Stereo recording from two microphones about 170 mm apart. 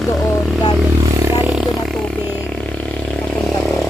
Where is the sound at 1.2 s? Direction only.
15° right (ahead or behind).